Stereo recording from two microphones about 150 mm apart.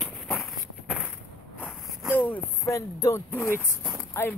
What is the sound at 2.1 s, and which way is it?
Speech, 10° left (ahead or behind).